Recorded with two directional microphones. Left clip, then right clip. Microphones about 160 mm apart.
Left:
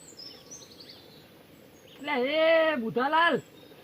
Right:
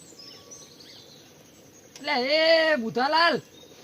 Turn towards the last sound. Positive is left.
turn(degrees=-25)  # may be behind; listen again after turning